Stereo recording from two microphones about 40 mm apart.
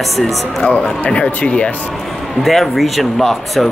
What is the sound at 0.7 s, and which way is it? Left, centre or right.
Speech, left.